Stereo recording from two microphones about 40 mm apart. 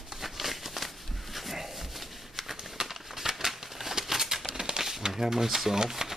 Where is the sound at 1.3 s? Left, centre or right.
Centre.